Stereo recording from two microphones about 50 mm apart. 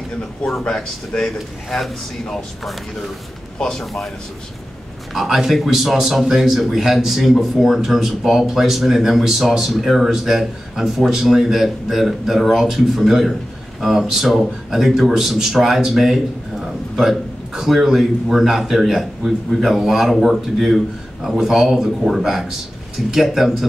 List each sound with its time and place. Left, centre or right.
0.7 s speech: centre
3.5 s a man's voice: centre
3.8 s a man's voice: centre
5.1 s a man's voice: centre